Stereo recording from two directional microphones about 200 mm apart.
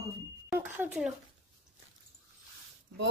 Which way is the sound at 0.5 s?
10° right (ahead or behind).